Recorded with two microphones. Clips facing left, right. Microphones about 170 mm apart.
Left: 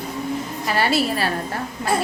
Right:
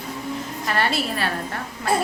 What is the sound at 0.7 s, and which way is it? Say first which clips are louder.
Speech: left 4 dB; 5° left (ahead or behind).